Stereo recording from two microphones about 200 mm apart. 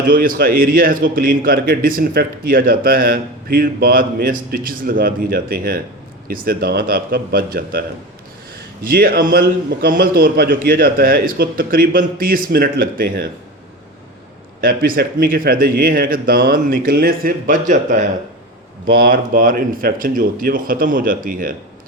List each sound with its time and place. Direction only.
0.1 s a man's voice: 45° right (ahead or behind)
14.6 s a man's voice: 45° right (ahead or behind)